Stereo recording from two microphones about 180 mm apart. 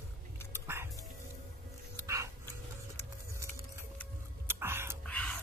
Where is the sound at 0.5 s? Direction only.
15° right (ahead or behind).